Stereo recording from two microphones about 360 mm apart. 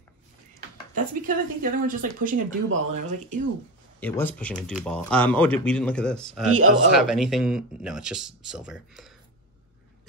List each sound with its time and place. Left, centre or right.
0.9 s speech: right
4.0 s speech: centre